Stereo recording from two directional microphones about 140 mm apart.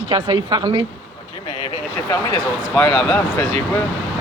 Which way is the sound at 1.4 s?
45° left (ahead or behind).